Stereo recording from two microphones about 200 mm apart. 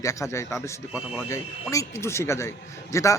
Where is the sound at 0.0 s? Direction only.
15° left (ahead or behind).